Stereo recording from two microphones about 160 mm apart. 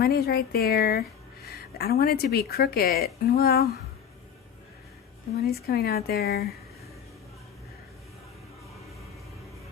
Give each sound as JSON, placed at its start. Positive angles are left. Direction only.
{"t": 0.0, "sound": "a woman's voice", "side_deg": 75}
{"t": 5.4, "sound": "a woman's voice", "side_deg": 75}